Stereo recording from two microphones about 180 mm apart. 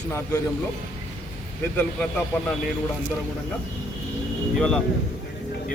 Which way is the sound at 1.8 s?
5° left (ahead or behind).